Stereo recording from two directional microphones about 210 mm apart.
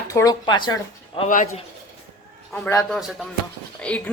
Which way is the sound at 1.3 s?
40° left (ahead or behind).